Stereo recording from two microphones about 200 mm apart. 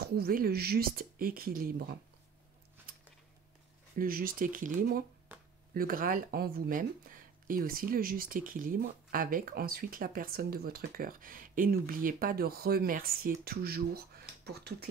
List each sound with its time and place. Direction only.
0.0 s speech: 50° right (ahead or behind)
4.0 s speech: 45° right (ahead or behind)